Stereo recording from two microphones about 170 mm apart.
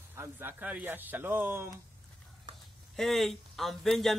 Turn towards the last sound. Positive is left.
turn(degrees=0)  # may be behind; listen again after turning